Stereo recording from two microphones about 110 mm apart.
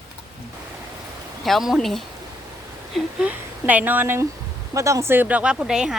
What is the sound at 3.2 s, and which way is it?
Speech, 15° right (ahead or behind).